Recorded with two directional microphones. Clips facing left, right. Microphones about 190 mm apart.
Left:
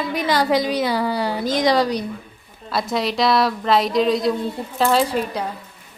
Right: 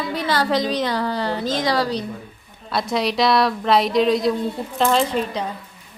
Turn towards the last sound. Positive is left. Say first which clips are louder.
# left 1 dB
turn(degrees=5)  # may be behind; listen again after turning